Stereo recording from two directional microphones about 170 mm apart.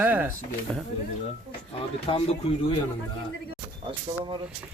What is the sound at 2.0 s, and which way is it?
Speech, 30° left (ahead or behind).